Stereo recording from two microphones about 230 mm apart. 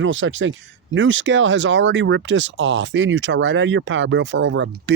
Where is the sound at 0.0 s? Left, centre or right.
Right.